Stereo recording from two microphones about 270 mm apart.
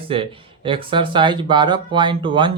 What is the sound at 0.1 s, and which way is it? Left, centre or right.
Speech, centre.